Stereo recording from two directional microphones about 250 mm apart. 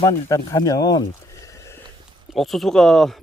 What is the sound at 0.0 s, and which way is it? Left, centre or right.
Speech, centre.